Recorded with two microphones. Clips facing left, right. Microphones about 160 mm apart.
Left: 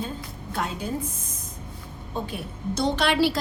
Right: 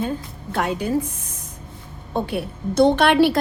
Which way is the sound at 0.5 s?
70° right (ahead or behind).